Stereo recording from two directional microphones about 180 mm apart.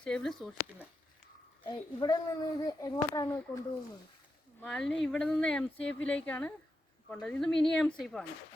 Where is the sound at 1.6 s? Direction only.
25° left (ahead or behind).